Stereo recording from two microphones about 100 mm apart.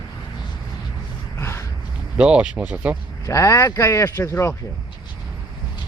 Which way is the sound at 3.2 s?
30° left (ahead or behind).